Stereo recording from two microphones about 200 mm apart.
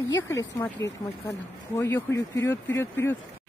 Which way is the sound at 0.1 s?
15° left (ahead or behind).